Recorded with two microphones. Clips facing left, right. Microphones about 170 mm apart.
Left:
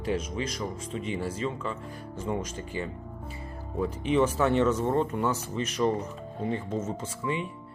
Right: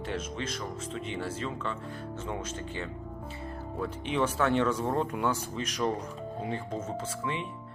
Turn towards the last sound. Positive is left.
turn(degrees=0)  # may be behind; listen again after turning